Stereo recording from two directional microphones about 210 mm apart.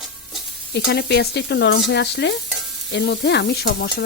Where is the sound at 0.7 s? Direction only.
50° left (ahead or behind).